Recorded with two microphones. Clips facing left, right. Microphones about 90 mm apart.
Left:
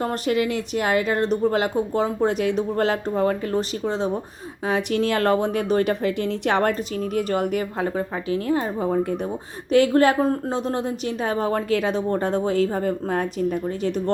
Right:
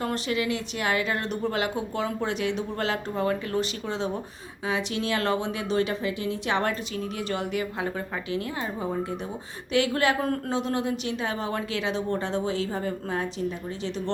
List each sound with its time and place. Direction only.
0.1 s speech: 45° left (ahead or behind)
4.6 s speech: 50° left (ahead or behind)
6.6 s speech: 45° left (ahead or behind)
10.2 s speech: 25° left (ahead or behind)
10.5 s speech: 35° left (ahead or behind)